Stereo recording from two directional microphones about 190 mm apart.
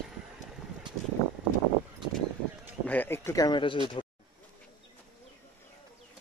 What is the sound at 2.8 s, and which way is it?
Speech, 10° left (ahead or behind).